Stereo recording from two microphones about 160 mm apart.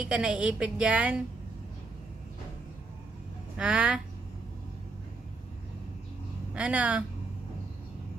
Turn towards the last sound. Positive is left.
turn(degrees=-10)  # may be behind; listen again after turning